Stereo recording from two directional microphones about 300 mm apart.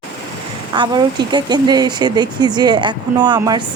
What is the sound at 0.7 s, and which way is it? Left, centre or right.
Speech, centre.